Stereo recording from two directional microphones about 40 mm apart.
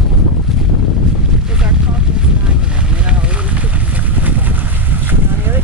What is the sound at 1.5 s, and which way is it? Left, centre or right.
Boat, right.